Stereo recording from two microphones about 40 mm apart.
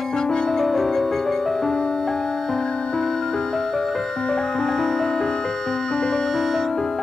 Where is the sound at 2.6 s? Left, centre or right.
Left.